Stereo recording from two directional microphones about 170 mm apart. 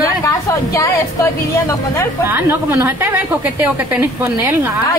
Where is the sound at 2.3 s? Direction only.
10° right (ahead or behind).